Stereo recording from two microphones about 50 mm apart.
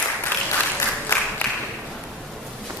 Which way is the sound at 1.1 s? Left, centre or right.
Left.